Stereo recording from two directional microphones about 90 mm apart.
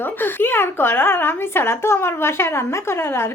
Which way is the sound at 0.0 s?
25° left (ahead or behind).